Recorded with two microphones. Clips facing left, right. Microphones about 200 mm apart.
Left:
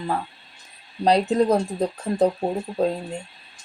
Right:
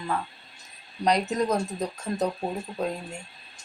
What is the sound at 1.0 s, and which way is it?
Speech, 30° left (ahead or behind).